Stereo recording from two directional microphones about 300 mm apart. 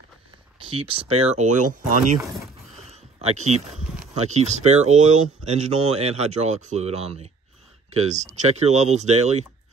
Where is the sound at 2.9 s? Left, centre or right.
Right.